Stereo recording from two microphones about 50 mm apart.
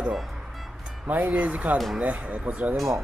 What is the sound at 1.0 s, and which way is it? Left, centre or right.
Speech, right.